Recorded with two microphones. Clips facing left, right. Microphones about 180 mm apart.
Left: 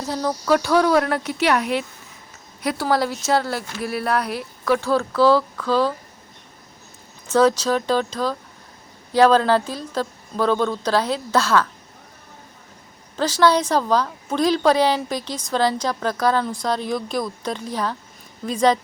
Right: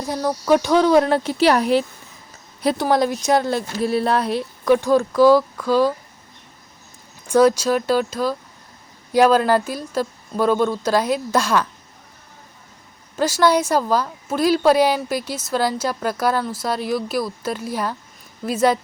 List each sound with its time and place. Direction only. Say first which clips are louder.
0.0 s speech: right 1 dB; 10° right (ahead or behind); by 2.8 s 30° right (ahead or behind)
2.8 s a woman's voice: right 1 dB; 15° right (ahead or behind)
7.3 s a woman's voice: right 2 dB; 10° right (ahead or behind)
13.1 s a woman's voice: right 1 dB; 10° right (ahead or behind)